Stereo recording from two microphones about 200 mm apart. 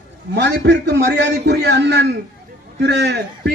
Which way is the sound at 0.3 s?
60° right (ahead or behind).